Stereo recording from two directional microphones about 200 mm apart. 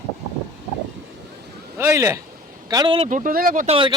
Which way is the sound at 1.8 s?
15° right (ahead or behind).